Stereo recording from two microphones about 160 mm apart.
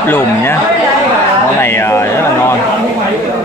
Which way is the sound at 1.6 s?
15° left (ahead or behind).